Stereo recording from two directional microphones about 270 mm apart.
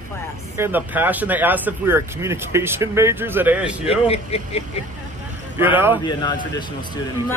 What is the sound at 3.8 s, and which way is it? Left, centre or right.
Speech, left.